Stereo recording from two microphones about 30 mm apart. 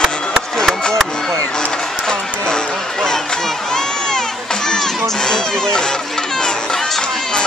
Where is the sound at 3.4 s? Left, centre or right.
Centre.